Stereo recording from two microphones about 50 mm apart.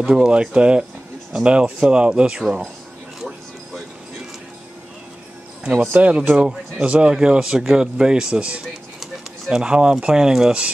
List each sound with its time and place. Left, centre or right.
0.1 s speech: centre
3.2 s music: centre
5.9 s speech: right